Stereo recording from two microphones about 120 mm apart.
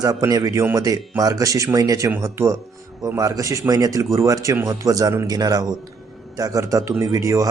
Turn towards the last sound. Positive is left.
turn(degrees=-25)  # may be behind; listen again after turning